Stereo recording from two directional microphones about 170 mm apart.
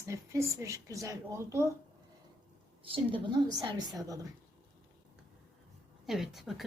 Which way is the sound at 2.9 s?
30° right (ahead or behind).